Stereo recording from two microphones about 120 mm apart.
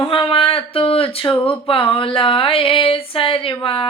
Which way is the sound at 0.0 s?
45° left (ahead or behind).